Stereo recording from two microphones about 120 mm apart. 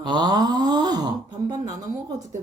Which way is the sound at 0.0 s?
40° right (ahead or behind).